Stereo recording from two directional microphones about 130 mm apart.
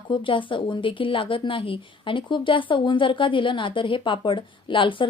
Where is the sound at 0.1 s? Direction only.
40° left (ahead or behind).